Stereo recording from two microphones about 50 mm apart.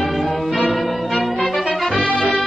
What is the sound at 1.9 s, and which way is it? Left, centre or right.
Music, centre.